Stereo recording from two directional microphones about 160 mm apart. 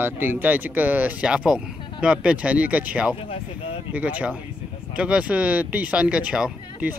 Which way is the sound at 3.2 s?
35° left (ahead or behind).